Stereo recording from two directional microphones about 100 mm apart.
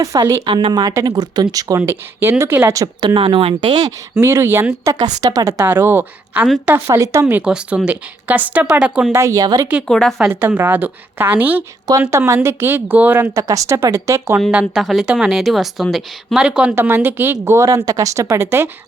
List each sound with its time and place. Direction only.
0.0 s speech: 35° right (ahead or behind)
0.4 s speech: 55° right (ahead or behind); by 1.8 s 35° right (ahead or behind)
1.8 s a woman's voice: 25° right (ahead or behind)
2.7 s speech: 35° right (ahead or behind)
3.2 s speech: 60° right (ahead or behind)
4.1 s a woman's voice: 25° right (ahead or behind)
4.9 s a woman's voice: 40° right (ahead or behind)
7.3 s speech: 10° right (ahead or behind)
9.1 s speech: 35° right (ahead or behind)
9.8 s speech: 5° left (ahead or behind)
10.4 s a woman's voice: 15° right (ahead or behind)
13.3 s a woman's voice: 35° right (ahead or behind)
14.5 s speech: 5° right (ahead or behind)
16.7 s a woman's voice: 20° right (ahead or behind)